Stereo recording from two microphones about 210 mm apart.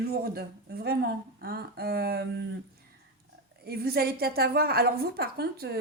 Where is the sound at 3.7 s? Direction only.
45° right (ahead or behind).